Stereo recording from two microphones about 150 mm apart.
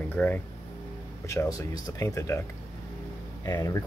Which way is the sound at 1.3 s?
20° left (ahead or behind).